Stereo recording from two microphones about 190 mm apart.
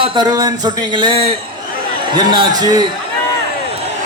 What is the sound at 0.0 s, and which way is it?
Speech, 20° right (ahead or behind).